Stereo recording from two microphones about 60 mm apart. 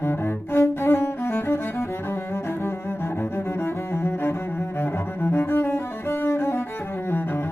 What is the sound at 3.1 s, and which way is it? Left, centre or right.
Cello, left.